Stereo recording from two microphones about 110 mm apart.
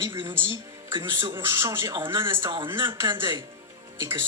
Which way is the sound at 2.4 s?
45° right (ahead or behind).